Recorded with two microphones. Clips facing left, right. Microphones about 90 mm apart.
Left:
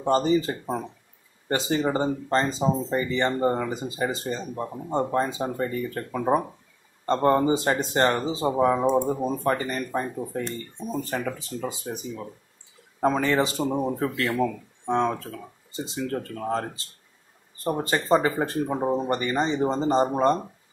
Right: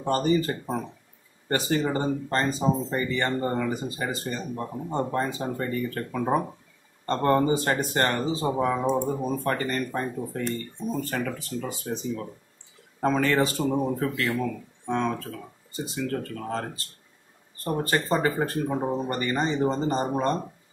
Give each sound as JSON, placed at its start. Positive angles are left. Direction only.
{"t": 0.0, "sound": "speech", "side_deg": 20}
{"t": 13.9, "sound": "speech", "side_deg": 30}